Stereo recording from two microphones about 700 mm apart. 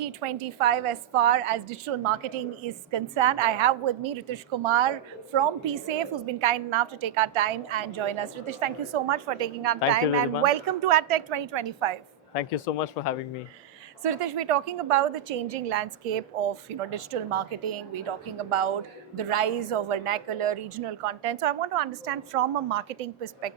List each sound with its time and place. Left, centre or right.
0.0 s a woman's voice: right
12.3 s speech: left
14.0 s a woman's voice: right
19.1 s a woman's voice: right